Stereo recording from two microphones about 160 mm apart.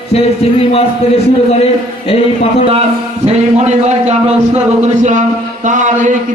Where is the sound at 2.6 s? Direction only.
40° right (ahead or behind).